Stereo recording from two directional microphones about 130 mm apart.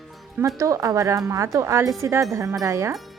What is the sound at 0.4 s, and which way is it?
Speech, 25° right (ahead or behind).